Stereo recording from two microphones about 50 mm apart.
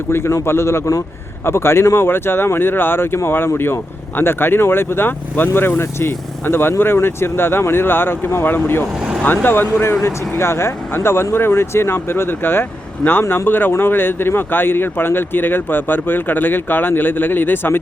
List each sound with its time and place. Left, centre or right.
0.1 s speech: left
1.5 s speech: left
2.0 s speech: left
10.0 s speech: left